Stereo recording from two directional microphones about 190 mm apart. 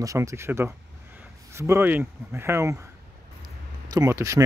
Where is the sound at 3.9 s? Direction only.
15° right (ahead or behind).